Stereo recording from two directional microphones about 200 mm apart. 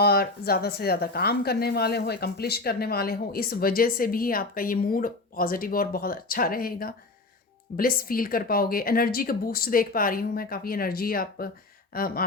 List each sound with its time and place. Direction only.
0.0 s speech: 50° left (ahead or behind)